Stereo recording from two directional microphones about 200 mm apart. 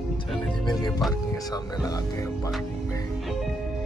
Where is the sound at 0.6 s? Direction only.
20° left (ahead or behind).